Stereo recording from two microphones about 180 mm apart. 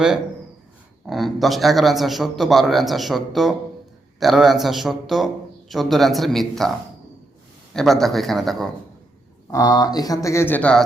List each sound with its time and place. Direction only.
1.0 s a man's voice: centre (ahead or behind)
7.7 s a man's voice: centre (ahead or behind)
9.5 s speech: 20° left (ahead or behind)